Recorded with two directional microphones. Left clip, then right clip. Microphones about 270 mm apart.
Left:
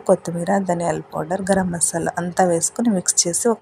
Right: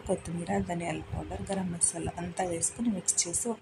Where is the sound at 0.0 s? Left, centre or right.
Left.